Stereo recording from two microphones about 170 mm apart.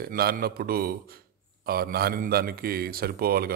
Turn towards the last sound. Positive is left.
turn(degrees=-65)  # may be behind; listen again after turning